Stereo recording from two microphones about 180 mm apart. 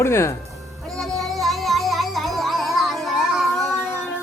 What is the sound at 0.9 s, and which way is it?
Music, centre (ahead or behind).